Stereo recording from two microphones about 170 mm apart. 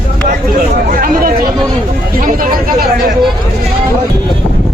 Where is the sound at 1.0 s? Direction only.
55° right (ahead or behind).